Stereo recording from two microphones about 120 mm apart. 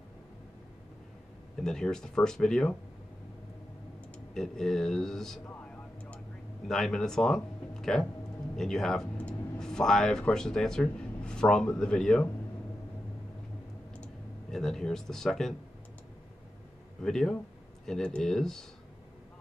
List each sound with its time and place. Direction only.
1.6 s speech: 5° left (ahead or behind)
4.3 s speech: 5° left (ahead or behind)
6.1 s a sound: 5° left (ahead or behind)
8.5 s speech: 5° left (ahead or behind)
13.9 s speech: 5° left (ahead or behind)
17.0 s speech: 5° left (ahead or behind)